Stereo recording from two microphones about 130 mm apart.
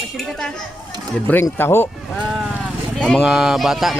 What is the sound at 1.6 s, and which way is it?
Speech, 15° left (ahead or behind).